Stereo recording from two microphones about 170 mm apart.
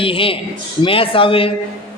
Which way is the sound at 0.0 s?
30° left (ahead or behind).